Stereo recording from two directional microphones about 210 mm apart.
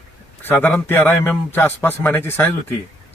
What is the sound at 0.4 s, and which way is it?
A man's voice, 10° left (ahead or behind).